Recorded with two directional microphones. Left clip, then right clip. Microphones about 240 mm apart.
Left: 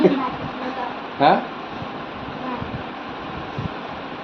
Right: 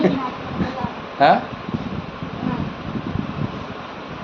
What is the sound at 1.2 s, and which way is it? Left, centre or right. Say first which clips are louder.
Speech: right 2 dB; right.